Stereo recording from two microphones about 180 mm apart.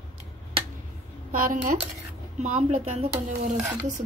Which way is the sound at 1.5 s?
45° right (ahead or behind).